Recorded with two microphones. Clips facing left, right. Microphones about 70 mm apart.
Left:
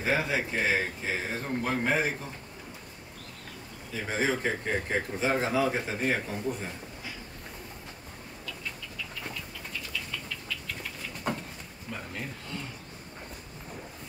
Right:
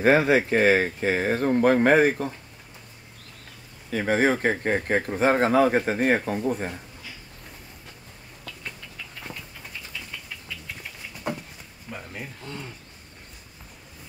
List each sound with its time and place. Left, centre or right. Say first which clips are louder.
0.0 s speech: right 10 dB; right
3.9 s speech: right 7 dB; right
11.3 s a sound: right 2 dB; centre